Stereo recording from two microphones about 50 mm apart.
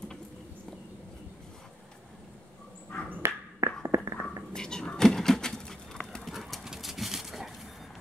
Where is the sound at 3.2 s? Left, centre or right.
Right.